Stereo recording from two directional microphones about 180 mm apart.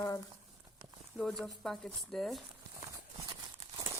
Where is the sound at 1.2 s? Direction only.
Centre (ahead or behind).